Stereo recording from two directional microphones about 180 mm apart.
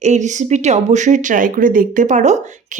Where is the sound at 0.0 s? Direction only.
40° right (ahead or behind).